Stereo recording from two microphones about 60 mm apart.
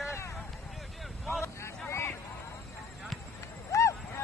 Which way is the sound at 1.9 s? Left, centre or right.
Left.